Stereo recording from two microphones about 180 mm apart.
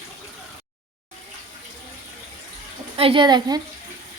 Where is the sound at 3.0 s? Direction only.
30° right (ahead or behind).